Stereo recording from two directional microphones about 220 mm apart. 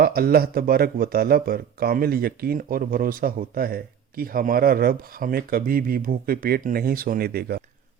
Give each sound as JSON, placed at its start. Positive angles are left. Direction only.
{"t": 0.0, "sound": "speech", "side_deg": -45}